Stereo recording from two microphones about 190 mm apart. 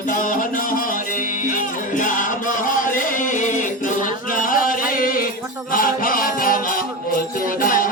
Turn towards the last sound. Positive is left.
turn(degrees=45)  # may be behind; listen again after turning